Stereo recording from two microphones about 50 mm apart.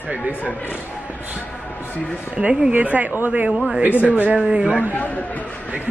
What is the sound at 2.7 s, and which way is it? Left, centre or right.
A man's voice, right.